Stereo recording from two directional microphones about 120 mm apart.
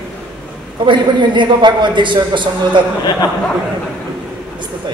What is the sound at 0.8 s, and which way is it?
A woman's voice, 40° right (ahead or behind).